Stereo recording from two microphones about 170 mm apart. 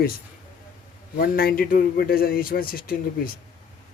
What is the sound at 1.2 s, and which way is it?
Speech, 60° left (ahead or behind).